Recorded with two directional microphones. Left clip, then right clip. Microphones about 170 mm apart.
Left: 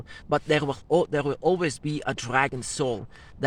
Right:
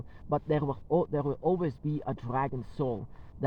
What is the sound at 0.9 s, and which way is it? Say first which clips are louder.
Speech: left 6 dB; 50° left (ahead or behind).